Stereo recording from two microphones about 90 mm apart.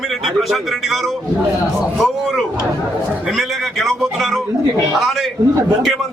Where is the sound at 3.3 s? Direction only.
Centre (ahead or behind).